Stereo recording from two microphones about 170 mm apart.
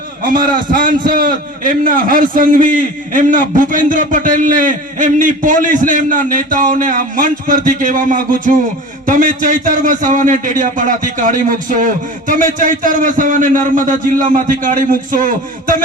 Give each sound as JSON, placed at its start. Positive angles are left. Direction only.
{"t": 0.2, "sound": "a man's voice", "side_deg": -55}